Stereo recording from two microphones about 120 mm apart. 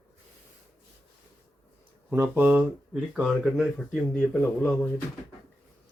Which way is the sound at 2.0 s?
15° right (ahead or behind).